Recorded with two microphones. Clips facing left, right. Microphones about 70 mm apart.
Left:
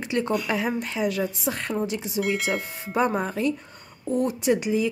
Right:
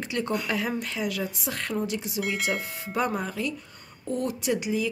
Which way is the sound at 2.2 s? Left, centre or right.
Centre.